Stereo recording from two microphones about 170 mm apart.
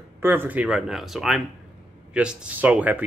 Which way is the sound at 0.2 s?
10° right (ahead or behind).